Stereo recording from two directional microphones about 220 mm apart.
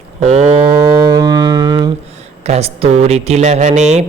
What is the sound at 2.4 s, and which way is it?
Mantra, 30° right (ahead or behind).